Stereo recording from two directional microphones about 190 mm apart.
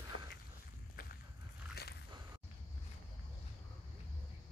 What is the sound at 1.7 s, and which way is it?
Biting, 55° left (ahead or behind).